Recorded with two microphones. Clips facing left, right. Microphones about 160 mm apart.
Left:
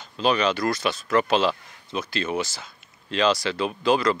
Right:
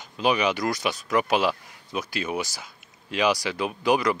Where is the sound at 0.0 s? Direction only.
15° right (ahead or behind).